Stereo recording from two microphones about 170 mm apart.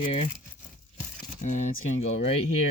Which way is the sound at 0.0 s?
30° left (ahead or behind).